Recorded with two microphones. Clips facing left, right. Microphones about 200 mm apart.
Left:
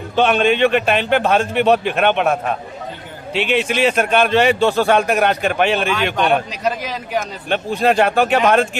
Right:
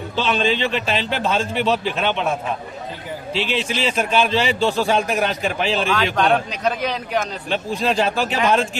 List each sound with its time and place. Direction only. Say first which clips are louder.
0.2 s a man's voice: left 6 dB; 60° left (ahead or behind)
6.5 s speech: even; centre (ahead or behind)
7.5 s a man's voice: left 5 dB; 60° left (ahead or behind)